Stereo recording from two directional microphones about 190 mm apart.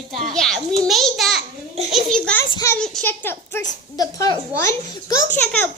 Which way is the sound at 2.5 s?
15° left (ahead or behind).